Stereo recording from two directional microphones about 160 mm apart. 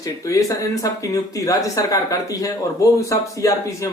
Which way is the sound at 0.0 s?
20° left (ahead or behind).